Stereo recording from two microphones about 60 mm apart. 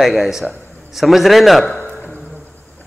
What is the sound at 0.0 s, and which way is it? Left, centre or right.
A man's voice, centre.